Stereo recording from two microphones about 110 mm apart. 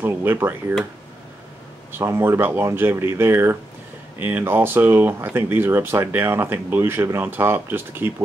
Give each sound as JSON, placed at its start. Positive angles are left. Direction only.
{"t": 0.0, "sound": "speech", "side_deg": -20}
{"t": 2.0, "sound": "speech", "side_deg": -20}